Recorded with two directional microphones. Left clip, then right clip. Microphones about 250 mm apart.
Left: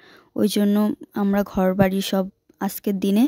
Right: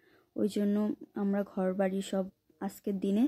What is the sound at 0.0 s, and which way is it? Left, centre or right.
A woman's voice, left.